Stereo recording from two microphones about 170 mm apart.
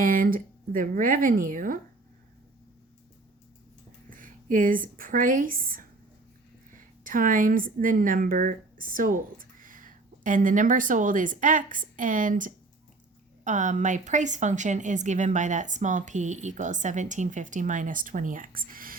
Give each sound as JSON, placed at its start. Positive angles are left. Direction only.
{"t": 0.0, "sound": "a woman's voice", "side_deg": -55}
{"t": 4.1, "sound": "speech", "side_deg": -50}
{"t": 7.0, "sound": "a woman's voice", "side_deg": -50}